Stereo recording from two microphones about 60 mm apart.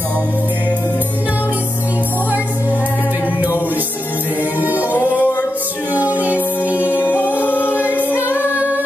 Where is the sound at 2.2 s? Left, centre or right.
Right.